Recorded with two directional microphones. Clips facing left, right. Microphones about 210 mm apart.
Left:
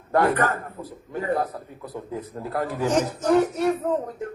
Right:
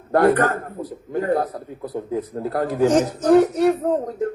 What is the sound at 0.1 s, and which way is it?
Speech, 40° right (ahead or behind).